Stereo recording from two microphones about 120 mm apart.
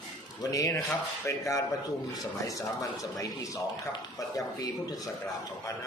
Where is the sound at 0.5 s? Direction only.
25° left (ahead or behind).